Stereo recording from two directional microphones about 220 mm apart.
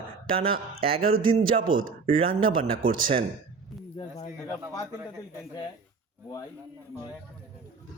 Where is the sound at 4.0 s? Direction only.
30° left (ahead or behind).